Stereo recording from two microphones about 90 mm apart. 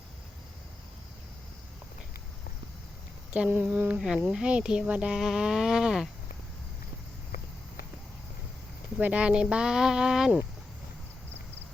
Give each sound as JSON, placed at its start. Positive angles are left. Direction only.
{"t": 3.5, "sound": "speech", "side_deg": -20}
{"t": 9.0, "sound": "speech", "side_deg": -15}